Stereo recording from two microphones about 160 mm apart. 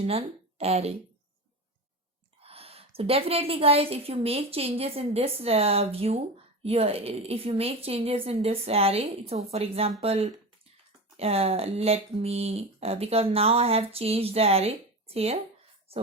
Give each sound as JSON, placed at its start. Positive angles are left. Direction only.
{"t": 0.0, "sound": "a woman's voice", "side_deg": -40}
{"t": 2.4, "sound": "a woman's voice", "side_deg": -40}